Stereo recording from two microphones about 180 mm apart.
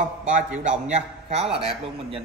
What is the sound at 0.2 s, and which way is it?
A man's voice, 45° right (ahead or behind).